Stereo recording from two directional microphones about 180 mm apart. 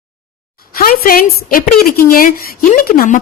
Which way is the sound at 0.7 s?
55° left (ahead or behind).